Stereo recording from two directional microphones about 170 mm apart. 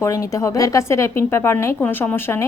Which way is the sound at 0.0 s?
20° left (ahead or behind).